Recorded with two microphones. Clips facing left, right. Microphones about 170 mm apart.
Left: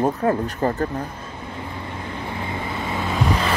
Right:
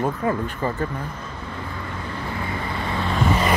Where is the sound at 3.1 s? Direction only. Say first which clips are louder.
Right 2 dB; 5° right (ahead or behind).